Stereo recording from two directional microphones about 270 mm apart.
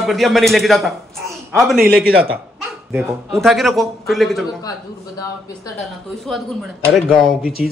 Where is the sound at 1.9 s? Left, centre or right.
Right.